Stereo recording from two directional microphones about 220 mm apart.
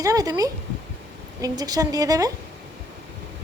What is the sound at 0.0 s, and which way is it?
Speech, 15° right (ahead or behind).